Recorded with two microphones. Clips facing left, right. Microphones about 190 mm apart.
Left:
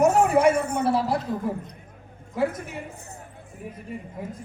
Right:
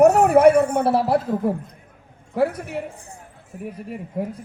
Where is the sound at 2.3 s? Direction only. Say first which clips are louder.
Right 4 dB; 65° right (ahead or behind).